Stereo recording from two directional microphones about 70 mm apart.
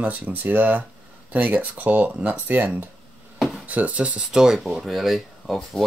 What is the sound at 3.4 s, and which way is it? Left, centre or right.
Dishes, centre.